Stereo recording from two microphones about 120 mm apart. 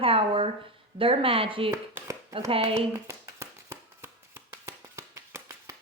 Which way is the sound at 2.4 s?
50° right (ahead or behind).